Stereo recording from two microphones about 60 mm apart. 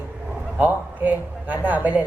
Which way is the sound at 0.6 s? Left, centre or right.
Right.